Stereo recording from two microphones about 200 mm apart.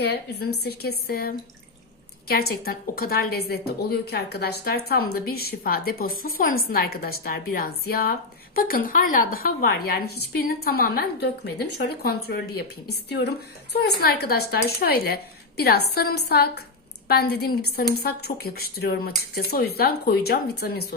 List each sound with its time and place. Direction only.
0.0 s a woman's voice: 55° left (ahead or behind)